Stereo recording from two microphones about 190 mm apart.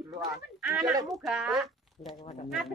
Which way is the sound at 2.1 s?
30° left (ahead or behind).